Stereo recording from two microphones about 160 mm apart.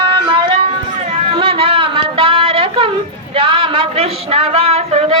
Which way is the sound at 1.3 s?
35° right (ahead or behind).